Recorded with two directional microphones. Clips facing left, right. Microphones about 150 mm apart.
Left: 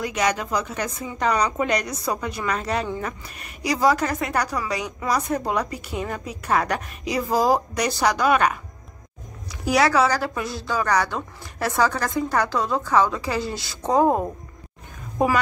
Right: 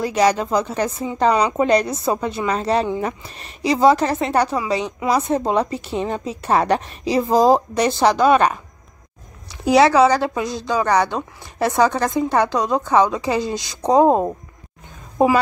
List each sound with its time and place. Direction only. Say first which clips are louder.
0.0 s a woman's voice: right 6 dB; 30° right (ahead or behind)